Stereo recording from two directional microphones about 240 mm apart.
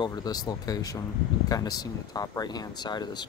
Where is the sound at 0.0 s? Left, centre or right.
Centre.